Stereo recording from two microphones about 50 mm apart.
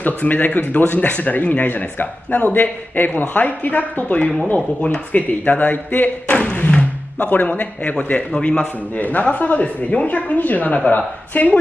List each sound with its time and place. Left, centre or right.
0.0 s speech: left
6.7 s a sound: left
7.2 s speech: left
8.9 s speech: left